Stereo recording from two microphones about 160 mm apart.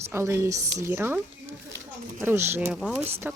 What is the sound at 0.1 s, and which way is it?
Speech, 15° right (ahead or behind).